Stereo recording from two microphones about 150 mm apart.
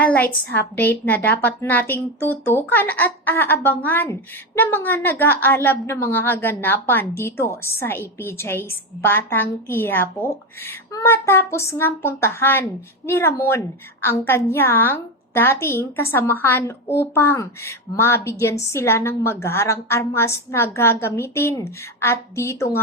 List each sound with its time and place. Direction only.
0.0 s a woman's voice: 10° left (ahead or behind)